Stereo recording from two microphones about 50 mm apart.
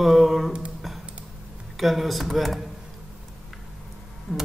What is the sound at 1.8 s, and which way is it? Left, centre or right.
Speech, centre.